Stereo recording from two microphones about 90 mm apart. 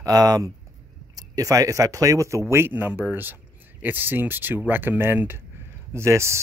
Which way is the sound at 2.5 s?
25° right (ahead or behind).